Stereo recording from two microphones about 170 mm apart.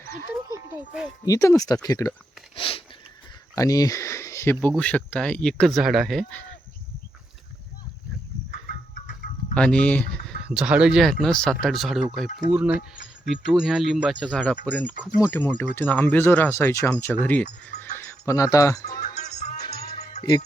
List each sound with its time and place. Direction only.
1.2 s speech: 20° left (ahead or behind)
2.6 s sniff: 30° left (ahead or behind)
3.5 s speech: 20° left (ahead or behind); by 6.4 s centre (ahead or behind)
9.6 s speech: 5° left (ahead or behind)
14.6 s speech: 10° left (ahead or behind)
14.9 s speech: 5° right (ahead or behind)
15.3 s speech: 10° left (ahead or behind)
19.0 s music: 45° left (ahead or behind)
19.5 s music: 20° left (ahead or behind)